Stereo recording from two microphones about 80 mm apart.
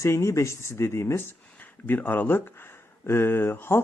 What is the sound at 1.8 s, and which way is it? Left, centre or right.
Speech, left.